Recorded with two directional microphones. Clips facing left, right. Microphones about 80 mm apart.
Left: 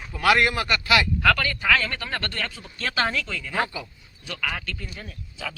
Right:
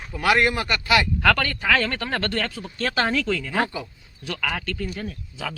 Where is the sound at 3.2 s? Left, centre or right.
Right.